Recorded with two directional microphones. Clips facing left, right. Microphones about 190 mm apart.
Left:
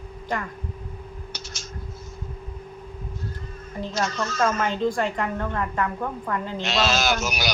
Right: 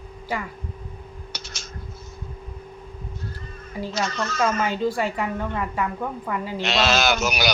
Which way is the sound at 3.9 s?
65° right (ahead or behind).